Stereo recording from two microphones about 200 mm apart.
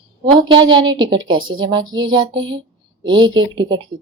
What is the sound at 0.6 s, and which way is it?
Speech, 20° right (ahead or behind).